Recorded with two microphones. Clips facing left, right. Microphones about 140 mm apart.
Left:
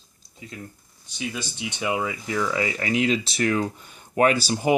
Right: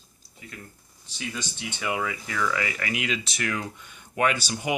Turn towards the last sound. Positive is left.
turn(degrees=35)  # may be behind; listen again after turning